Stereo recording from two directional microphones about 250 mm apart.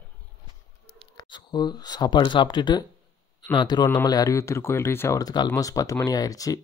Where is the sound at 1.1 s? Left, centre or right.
Centre.